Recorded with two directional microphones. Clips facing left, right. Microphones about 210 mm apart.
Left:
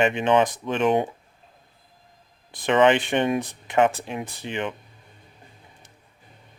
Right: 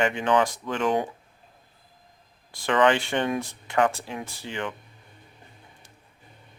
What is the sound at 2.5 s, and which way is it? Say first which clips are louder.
Speech: left 3 dB; 20° left (ahead or behind).